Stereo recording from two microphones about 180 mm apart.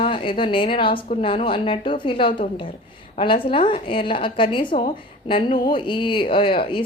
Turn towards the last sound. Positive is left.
turn(degrees=30)  # may be behind; listen again after turning